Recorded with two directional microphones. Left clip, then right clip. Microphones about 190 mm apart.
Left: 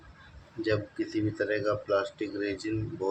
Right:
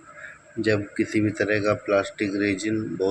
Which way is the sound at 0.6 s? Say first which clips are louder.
Right 6 dB; 25° right (ahead or behind).